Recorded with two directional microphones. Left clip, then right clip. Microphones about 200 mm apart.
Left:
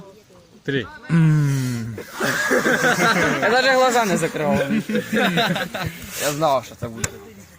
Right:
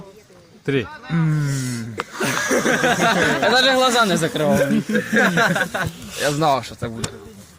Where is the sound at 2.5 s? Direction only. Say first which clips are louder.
Even; 50° right (ahead or behind).